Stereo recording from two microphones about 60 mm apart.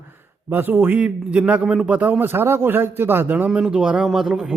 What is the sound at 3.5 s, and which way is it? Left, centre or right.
A man's voice, centre.